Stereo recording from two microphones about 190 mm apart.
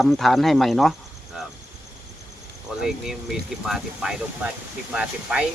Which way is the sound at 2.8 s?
Centre (ahead or behind).